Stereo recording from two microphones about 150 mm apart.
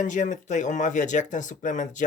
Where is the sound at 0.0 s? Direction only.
55° left (ahead or behind).